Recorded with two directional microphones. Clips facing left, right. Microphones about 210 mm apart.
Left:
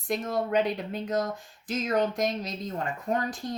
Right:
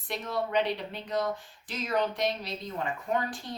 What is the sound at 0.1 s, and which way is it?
Speech, 45° left (ahead or behind).